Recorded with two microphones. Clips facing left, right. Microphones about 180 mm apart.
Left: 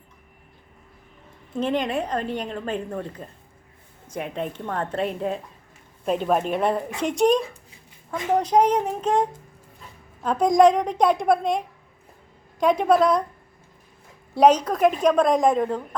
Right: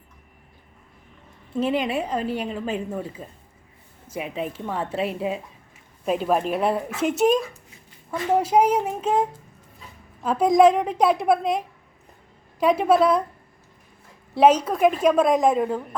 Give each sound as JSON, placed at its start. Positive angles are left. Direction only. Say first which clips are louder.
{"t": 1.5, "sound": "a woman's voice", "louder": "right 1 dB", "side_deg": -5}
{"t": 10.2, "sound": "a woman's voice", "louder": "even", "side_deg": -5}
{"t": 14.3, "sound": "a woman's voice", "louder": "even", "side_deg": -5}